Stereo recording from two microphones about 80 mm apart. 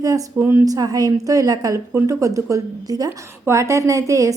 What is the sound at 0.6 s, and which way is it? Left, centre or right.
A woman's voice, right.